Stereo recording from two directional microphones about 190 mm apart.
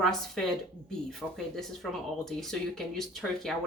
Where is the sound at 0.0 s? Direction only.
Centre (ahead or behind).